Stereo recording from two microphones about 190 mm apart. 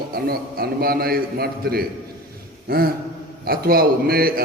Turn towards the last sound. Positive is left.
turn(degrees=-50)  # may be behind; listen again after turning